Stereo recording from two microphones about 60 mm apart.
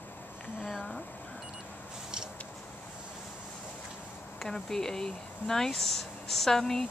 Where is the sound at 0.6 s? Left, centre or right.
Centre.